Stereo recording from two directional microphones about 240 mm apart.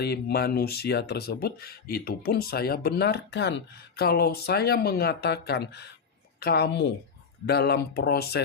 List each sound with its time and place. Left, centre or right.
0.0 s a woman's voice: left